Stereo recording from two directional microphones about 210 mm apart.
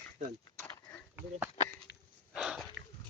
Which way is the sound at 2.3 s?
5° right (ahead or behind).